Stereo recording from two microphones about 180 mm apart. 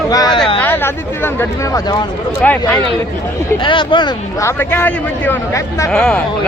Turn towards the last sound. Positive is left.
turn(degrees=5)  # may be behind; listen again after turning